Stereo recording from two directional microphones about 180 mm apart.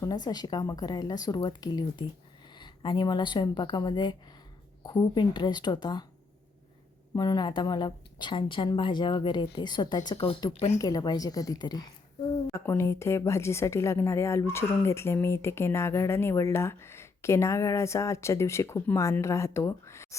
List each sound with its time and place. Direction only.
0.0 s a woman's voice: 20° left (ahead or behind)
7.2 s a woman's voice: 25° left (ahead or behind)
10.8 s a woman's voice: 20° left (ahead or behind)